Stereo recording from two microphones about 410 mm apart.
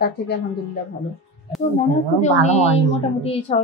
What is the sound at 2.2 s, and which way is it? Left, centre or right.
Speech, centre.